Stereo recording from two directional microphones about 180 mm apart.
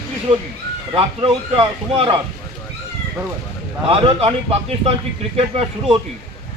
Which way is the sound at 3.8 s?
30° right (ahead or behind).